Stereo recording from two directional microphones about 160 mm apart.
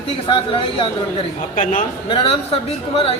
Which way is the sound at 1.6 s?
50° left (ahead or behind).